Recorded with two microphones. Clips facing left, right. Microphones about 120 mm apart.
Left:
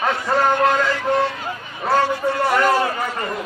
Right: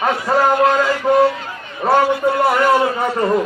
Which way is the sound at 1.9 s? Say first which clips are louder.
Right 4 dB; 15° right (ahead or behind).